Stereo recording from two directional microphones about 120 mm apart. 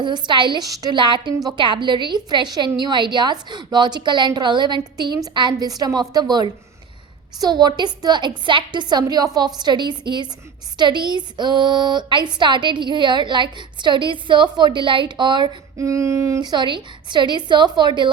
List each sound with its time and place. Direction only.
0.0 s a woman's voice: 40° right (ahead or behind)
15.8 s a sound: 25° right (ahead or behind)
16.4 s a woman's voice: 35° right (ahead or behind)